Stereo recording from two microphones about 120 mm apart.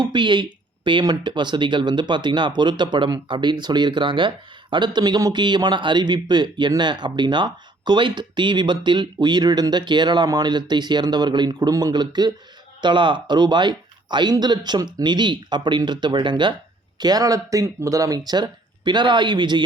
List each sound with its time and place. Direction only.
0.0 s a man's voice: 40° right (ahead or behind)